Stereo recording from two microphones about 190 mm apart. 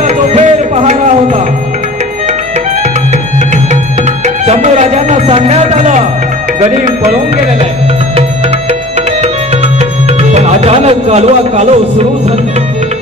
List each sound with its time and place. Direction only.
0.0 s tabla: 35° right (ahead or behind)
4.5 s music: 35° right (ahead or behind)
9.2 s music: 35° right (ahead or behind)